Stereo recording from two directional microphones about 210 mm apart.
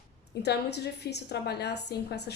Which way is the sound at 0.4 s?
55° left (ahead or behind).